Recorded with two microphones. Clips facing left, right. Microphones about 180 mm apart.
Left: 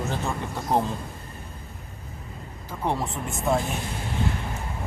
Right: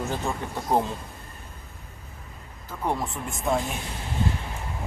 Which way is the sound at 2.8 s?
10° right (ahead or behind).